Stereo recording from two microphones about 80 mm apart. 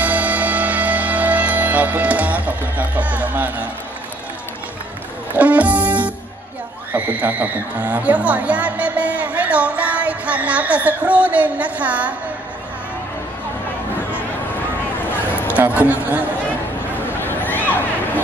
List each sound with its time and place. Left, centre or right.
0.0 s music: centre
5.3 s music: centre
6.9 s a woman's voice: right
15.0 s a sound: left
15.5 s speech: right
17.2 s a sound: left